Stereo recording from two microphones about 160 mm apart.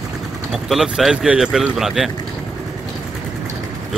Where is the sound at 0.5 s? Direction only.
Centre (ahead or behind).